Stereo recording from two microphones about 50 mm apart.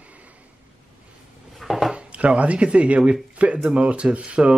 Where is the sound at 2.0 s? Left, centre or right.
Right.